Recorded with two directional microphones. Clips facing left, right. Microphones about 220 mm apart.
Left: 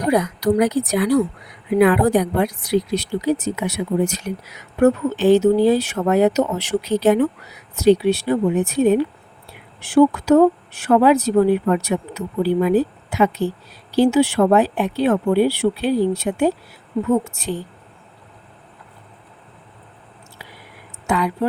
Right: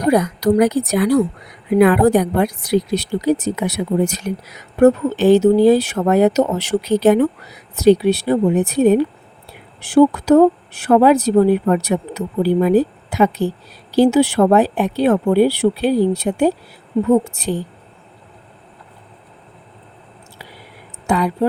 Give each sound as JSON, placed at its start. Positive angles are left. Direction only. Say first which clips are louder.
{"t": 0.1, "sound": "speech", "louder": "right 3 dB", "side_deg": -40}
{"t": 21.1, "sound": "speech", "louder": "right 3 dB", "side_deg": -35}